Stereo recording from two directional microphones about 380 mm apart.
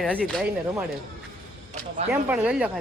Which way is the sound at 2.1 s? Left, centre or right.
Centre.